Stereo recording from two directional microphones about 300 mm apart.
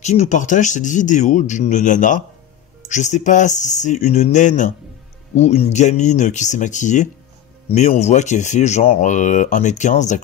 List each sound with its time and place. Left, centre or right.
0.0 s speech: left